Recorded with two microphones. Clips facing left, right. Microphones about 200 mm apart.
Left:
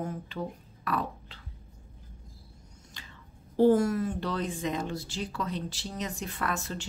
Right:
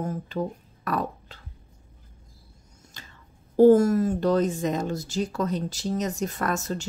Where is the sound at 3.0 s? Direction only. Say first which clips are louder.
Right 3 dB; 45° right (ahead or behind).